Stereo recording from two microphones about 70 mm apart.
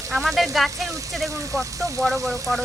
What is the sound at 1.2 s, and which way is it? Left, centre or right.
Speech, right.